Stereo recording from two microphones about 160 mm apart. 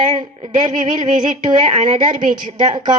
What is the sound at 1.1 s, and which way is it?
A woman's voice, 50° right (ahead or behind).